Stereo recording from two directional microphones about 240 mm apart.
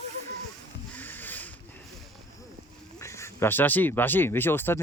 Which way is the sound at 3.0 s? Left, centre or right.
Centre.